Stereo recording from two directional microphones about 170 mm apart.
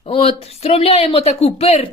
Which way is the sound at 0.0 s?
35° left (ahead or behind).